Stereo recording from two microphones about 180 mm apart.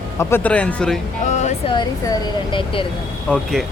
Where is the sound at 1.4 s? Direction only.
40° left (ahead or behind).